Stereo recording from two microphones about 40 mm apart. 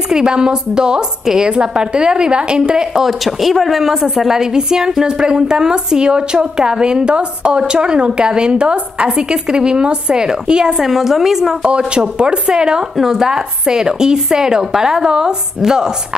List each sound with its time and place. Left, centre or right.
0.1 s speech: centre
11.9 s speech: right